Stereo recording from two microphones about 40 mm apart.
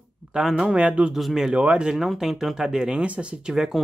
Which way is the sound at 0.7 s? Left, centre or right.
Right.